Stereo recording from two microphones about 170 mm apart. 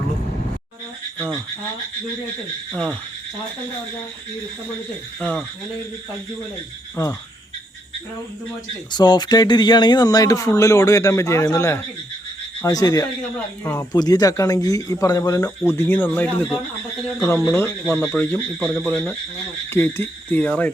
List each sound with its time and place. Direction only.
2.7 s speech: 5° left (ahead or behind)
5.2 s speech: 5° left (ahead or behind)
6.9 s speech: 15° left (ahead or behind)
8.9 s speech: 25° left (ahead or behind); by 20.7 s 10° left (ahead or behind)